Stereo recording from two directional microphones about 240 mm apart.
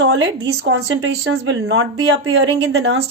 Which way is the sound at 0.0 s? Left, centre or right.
Right.